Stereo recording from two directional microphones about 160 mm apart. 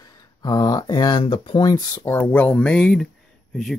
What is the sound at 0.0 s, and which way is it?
Speech, 25° left (ahead or behind).